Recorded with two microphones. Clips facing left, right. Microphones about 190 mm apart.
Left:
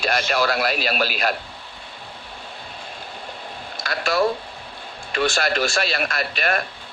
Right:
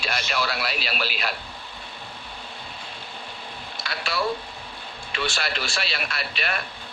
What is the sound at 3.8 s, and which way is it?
Speech, 45° left (ahead or behind).